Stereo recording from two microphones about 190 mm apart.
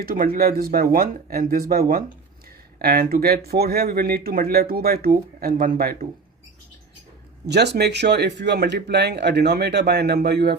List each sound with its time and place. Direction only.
0.0 s speech: 50° right (ahead or behind)
7.4 s speech: 60° right (ahead or behind)